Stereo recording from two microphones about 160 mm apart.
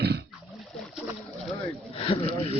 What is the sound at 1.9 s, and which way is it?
Speech, 35° left (ahead or behind).